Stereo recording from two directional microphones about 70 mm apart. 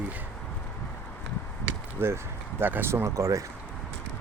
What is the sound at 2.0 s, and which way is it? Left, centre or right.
Speech, right.